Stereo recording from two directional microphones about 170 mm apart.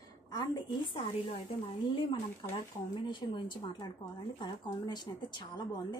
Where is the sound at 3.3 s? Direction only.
25° left (ahead or behind).